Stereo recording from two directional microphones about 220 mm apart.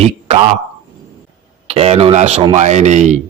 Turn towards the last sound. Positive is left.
turn(degrees=-30)  # may be behind; listen again after turning